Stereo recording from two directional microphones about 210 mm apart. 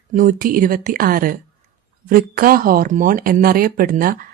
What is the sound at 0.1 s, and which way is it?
Speech, 40° right (ahead or behind).